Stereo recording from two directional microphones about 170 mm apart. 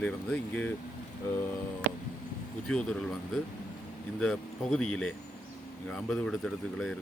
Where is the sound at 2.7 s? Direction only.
5° left (ahead or behind).